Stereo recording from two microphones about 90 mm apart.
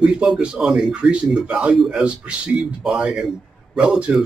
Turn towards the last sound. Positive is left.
turn(degrees=-10)  # may be behind; listen again after turning